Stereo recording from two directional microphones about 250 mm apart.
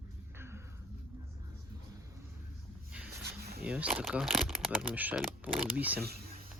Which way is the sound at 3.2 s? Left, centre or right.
Right.